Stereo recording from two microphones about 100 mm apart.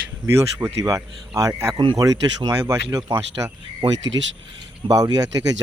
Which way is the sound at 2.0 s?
35° right (ahead or behind).